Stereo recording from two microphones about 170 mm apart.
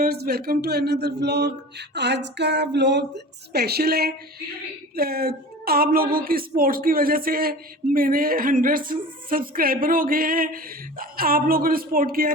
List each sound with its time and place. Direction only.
0.0 s speech: 65° right (ahead or behind)
2.0 s a sound: 90° right
3.5 s a woman's voice: 70° right (ahead or behind)